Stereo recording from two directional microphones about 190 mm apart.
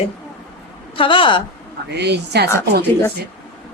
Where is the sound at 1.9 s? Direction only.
60° right (ahead or behind).